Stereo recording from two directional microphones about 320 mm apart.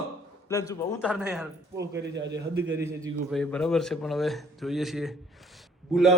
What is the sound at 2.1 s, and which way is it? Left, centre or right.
Speech, right.